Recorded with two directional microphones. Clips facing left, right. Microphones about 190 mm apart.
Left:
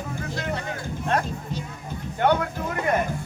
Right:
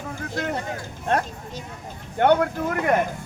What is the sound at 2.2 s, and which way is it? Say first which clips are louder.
Speech: right 4 dB; 60° right (ahead or behind).